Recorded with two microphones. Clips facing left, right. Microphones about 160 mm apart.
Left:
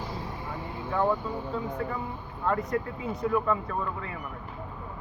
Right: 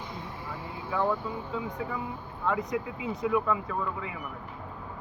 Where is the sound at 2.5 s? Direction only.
Centre (ahead or behind).